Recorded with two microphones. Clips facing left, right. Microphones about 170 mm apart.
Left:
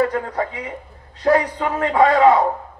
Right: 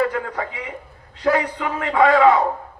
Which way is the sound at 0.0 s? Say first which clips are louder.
Left 2 dB; 35° left (ahead or behind).